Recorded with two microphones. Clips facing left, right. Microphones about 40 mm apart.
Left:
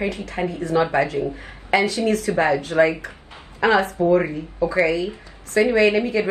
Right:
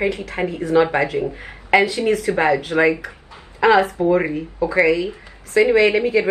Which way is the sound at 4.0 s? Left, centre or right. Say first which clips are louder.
Even; right.